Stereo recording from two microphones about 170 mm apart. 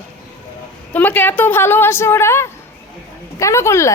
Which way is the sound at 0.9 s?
10° left (ahead or behind).